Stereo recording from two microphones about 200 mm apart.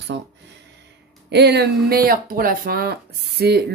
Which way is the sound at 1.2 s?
55° right (ahead or behind).